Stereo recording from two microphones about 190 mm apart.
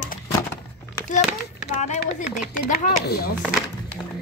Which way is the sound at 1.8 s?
40° left (ahead or behind).